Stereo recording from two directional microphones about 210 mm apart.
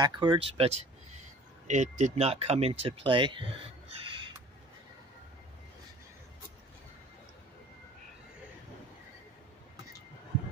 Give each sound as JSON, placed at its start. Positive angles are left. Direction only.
{"t": 0.0, "sound": "speech", "side_deg": -20}